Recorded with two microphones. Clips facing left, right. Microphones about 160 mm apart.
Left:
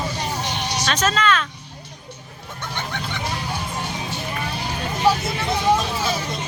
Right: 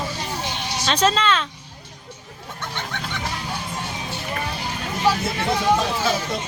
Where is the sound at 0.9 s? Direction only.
30° right (ahead or behind).